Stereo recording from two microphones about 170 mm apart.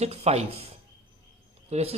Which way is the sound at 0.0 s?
35° right (ahead or behind).